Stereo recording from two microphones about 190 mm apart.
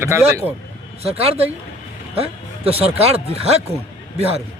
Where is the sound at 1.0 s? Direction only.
30° right (ahead or behind).